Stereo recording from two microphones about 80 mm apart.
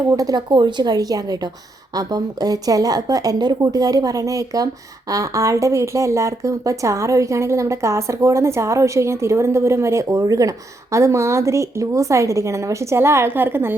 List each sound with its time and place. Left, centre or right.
0.1 s speech: right
0.5 s a woman's voice: right